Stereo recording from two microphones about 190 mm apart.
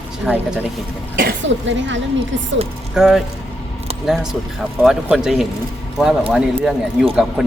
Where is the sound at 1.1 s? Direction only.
55° right (ahead or behind); by 2.0 s 75° right (ahead or behind).